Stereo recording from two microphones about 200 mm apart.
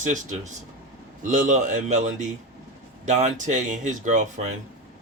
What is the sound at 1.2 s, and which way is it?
A man's voice, 40° right (ahead or behind).